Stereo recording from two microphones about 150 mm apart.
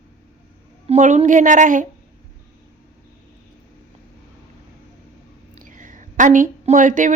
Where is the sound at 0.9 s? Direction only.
55° right (ahead or behind).